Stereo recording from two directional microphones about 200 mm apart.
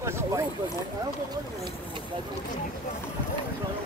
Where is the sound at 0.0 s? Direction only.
15° right (ahead or behind).